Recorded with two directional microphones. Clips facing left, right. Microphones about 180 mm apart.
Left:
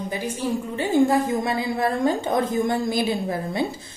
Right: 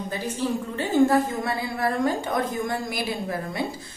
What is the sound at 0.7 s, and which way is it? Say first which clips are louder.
A woman's voice: left 1 dB; 15° left (ahead or behind).